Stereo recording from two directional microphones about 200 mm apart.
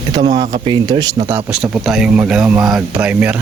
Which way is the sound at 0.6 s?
20° right (ahead or behind).